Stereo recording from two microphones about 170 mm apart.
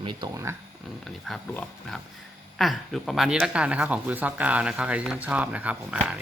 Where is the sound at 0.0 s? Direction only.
25° right (ahead or behind).